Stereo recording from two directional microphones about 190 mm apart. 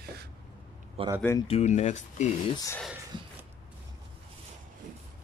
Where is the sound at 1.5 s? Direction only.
35° left (ahead or behind).